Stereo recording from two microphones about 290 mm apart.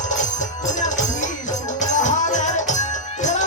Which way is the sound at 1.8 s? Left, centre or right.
Left.